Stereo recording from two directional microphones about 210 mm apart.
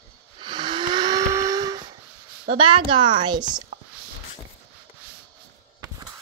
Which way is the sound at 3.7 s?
30° right (ahead or behind).